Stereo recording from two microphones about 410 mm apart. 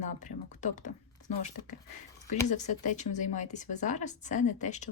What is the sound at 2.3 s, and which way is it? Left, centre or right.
Speech, centre.